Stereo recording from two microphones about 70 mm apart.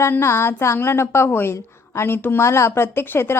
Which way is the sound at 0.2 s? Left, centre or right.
Left.